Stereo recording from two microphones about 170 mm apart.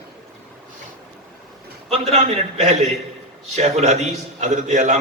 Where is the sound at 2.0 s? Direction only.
40° right (ahead or behind).